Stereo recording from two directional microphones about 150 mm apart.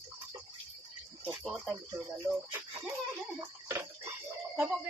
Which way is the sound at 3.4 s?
15° right (ahead or behind).